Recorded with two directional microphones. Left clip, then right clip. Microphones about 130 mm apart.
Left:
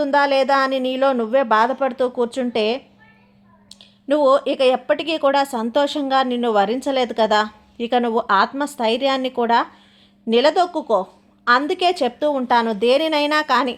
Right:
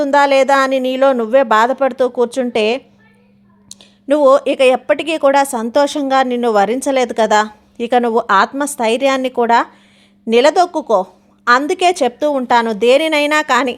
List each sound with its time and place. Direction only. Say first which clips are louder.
0.0 s speech: right 5 dB; 40° right (ahead or behind)